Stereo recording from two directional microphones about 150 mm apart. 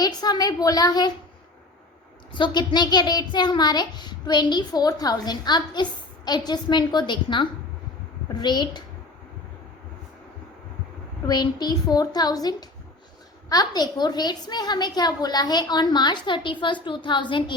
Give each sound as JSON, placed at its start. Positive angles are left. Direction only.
{"t": 0.0, "sound": "a child's voice", "side_deg": 25}
{"t": 2.3, "sound": "a child's voice", "side_deg": 30}
{"t": 11.3, "sound": "a child's voice", "side_deg": 25}